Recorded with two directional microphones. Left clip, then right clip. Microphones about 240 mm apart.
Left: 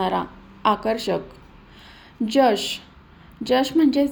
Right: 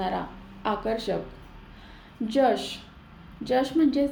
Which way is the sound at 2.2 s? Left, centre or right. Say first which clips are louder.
Left 5 dB; left.